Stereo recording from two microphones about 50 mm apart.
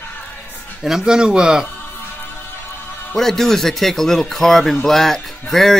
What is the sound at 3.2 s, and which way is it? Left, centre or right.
Speech, centre.